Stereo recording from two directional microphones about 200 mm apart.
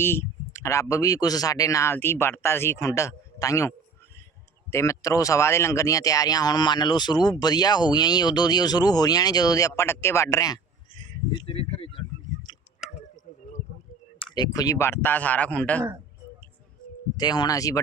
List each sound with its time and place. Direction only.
0.0 s speech: 10° left (ahead or behind); by 11.9 s 30° left (ahead or behind)
14.3 s speech: 20° left (ahead or behind)
17.2 s speech: 20° left (ahead or behind)